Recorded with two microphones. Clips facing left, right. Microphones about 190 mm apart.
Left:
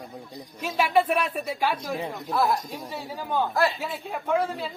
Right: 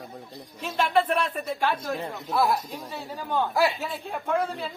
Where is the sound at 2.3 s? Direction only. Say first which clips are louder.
Right 1 dB; 5° right (ahead or behind).